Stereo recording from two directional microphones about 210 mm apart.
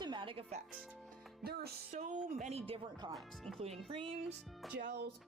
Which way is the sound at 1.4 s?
50° right (ahead or behind).